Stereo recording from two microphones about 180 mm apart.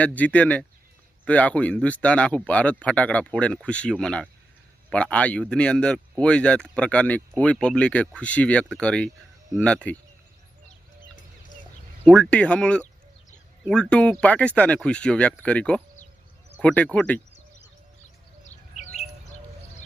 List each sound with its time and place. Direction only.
0.0 s speech: 10° left (ahead or behind)
12.0 s speech: 5° left (ahead or behind)
18.4 s bird: 40° left (ahead or behind)